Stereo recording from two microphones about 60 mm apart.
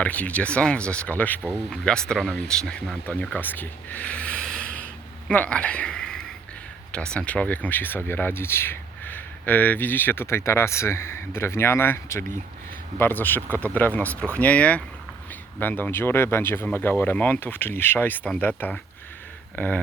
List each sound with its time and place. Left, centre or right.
0.0 s speech: left
1.4 s speech: right
1.7 s speech: centre
4.4 s snort: centre
5.3 s speech: left
13.0 s speech: left
15.6 s speech: left